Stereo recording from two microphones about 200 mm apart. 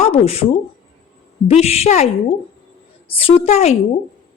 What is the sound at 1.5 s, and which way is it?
A woman's voice, 30° left (ahead or behind).